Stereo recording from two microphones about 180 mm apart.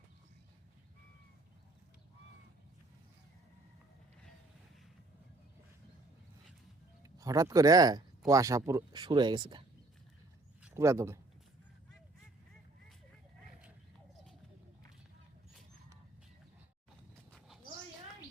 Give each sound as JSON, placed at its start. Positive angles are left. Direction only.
{"t": 7.0, "sound": "speech", "side_deg": -20}
{"t": 10.8, "sound": "speech", "side_deg": -15}